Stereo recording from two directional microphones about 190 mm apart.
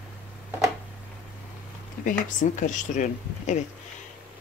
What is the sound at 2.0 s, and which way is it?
Speech, 45° left (ahead or behind).